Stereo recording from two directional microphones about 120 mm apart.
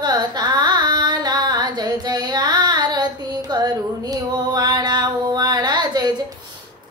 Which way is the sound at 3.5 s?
35° right (ahead or behind).